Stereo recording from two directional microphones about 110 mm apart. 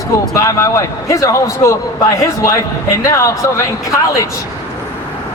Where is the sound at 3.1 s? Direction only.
30° left (ahead or behind).